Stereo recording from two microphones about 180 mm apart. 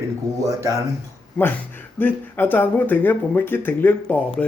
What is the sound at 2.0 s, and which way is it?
Speech, 10° left (ahead or behind).